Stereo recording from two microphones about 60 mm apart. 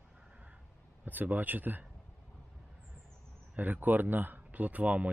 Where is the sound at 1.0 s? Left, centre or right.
Right.